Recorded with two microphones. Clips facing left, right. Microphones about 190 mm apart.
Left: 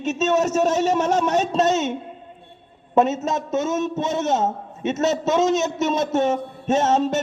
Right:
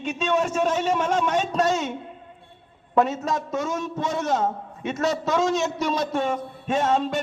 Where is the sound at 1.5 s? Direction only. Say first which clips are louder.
Left 3 dB; 25° left (ahead or behind).